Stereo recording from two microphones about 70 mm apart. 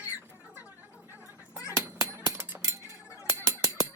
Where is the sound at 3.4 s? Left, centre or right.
Right.